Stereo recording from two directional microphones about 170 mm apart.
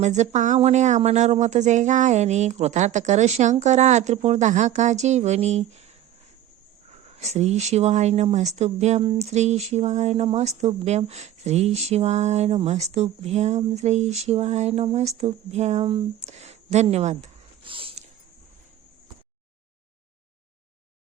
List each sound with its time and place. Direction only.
0.0 s speech: 45° right (ahead or behind)
6.9 s speech: 40° right (ahead or behind)
17.7 s a sound: 30° right (ahead or behind)